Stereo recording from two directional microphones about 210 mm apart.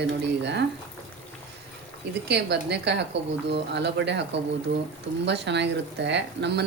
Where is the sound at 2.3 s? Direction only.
55° right (ahead or behind).